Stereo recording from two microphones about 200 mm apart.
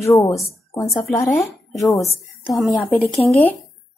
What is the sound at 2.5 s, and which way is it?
A woman's voice, centre (ahead or behind).